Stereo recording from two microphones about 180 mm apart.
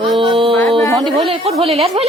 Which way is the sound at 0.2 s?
30° right (ahead or behind).